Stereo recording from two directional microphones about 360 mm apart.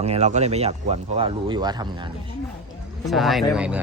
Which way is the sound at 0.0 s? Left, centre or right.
Centre.